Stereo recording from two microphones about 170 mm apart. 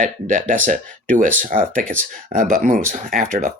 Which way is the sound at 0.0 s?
50° right (ahead or behind).